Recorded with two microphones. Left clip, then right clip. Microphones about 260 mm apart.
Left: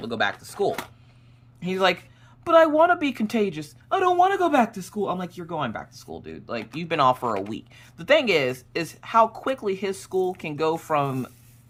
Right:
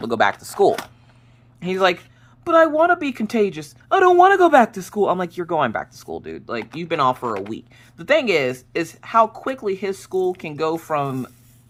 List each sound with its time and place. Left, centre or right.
0.0 s speech: centre
1.5 s a woman's voice: centre